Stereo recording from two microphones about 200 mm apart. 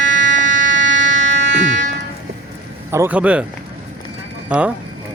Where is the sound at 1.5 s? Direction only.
40° right (ahead or behind).